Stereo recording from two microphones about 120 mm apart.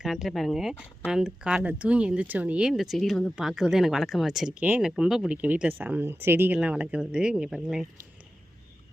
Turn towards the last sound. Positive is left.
turn(degrees=-5)  # may be behind; listen again after turning